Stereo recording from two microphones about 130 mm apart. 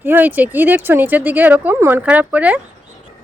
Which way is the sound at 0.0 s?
15° right (ahead or behind).